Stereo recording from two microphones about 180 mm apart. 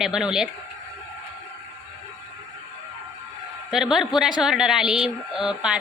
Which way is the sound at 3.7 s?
Centre (ahead or behind).